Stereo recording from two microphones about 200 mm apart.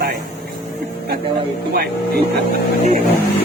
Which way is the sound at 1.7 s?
50° right (ahead or behind).